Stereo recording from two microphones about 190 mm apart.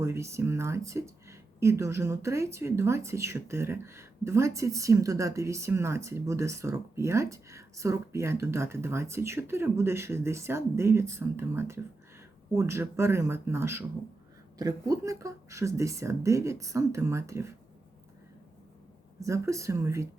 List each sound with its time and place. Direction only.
0.0 s speech: 15° right (ahead or behind)
19.2 s speech: 15° right (ahead or behind)